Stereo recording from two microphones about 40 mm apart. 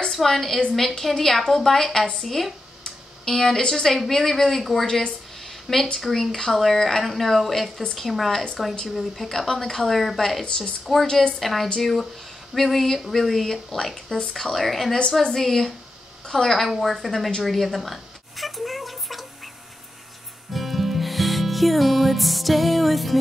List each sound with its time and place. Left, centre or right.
0.1 s a woman's voice: centre
4.8 s a woman's voice: centre
5.9 s a woman's voice: centre
16.5 s a woman's voice: centre
17.4 s a sound: centre
20.5 s music: centre